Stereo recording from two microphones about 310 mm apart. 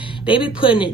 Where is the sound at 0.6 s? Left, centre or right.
Centre.